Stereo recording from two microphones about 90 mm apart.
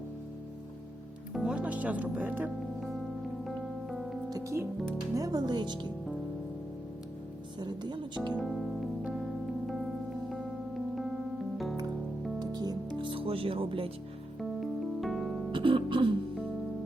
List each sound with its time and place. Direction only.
1.3 s speech: 10° right (ahead or behind)
3.4 s music: centre (ahead or behind)
4.3 s speech: 40° right (ahead or behind)
7.6 s speech: 55° right (ahead or behind)
8.4 s music: centre (ahead or behind)
12.4 s music: 50° right (ahead or behind)
13.0 s speech: 75° right (ahead or behind)
14.3 s music: centre (ahead or behind)
15.5 s music: 70° right (ahead or behind)